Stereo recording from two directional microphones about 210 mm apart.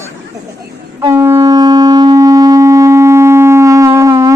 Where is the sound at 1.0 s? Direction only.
15° right (ahead or behind).